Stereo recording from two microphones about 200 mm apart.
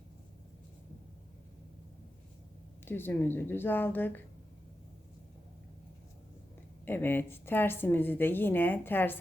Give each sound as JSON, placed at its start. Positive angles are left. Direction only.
{"t": 2.8, "sound": "speech", "side_deg": 10}
{"t": 6.8, "sound": "speech", "side_deg": 10}